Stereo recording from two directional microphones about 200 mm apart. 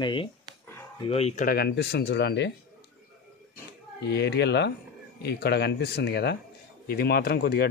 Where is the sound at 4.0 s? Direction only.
55° left (ahead or behind).